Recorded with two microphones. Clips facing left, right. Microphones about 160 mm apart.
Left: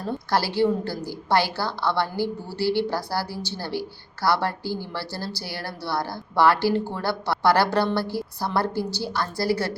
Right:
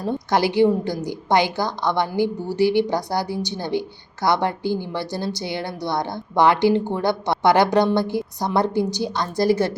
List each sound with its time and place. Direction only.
0.0 s a woman's voice: 20° right (ahead or behind)